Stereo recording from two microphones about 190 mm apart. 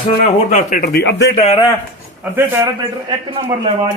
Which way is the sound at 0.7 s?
55° left (ahead or behind).